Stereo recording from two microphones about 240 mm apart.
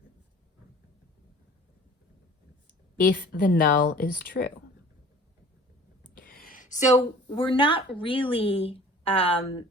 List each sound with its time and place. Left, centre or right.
3.0 s speech: left
6.1 s a sound: left
7.9 s a woman's voice: left